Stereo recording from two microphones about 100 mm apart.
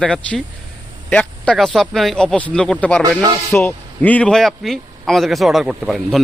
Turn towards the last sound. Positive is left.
turn(degrees=0)  # may be behind; listen again after turning